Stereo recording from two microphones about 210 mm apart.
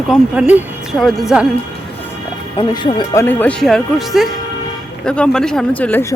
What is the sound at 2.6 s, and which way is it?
Speech, 20° left (ahead or behind).